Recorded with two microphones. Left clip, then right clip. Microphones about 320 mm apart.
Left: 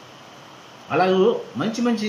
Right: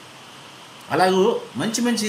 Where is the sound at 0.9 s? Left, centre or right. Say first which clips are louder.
Even; right.